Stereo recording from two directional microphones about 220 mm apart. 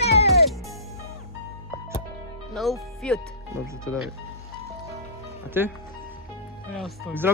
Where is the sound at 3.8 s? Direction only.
15° right (ahead or behind).